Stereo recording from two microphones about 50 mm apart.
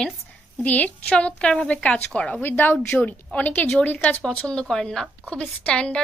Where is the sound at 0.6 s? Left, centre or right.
Left.